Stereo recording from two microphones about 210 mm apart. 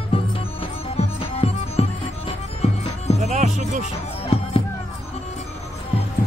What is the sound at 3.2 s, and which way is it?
Music, 35° right (ahead or behind).